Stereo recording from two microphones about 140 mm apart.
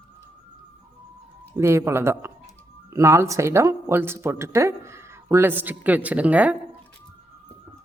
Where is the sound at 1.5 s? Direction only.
20° right (ahead or behind).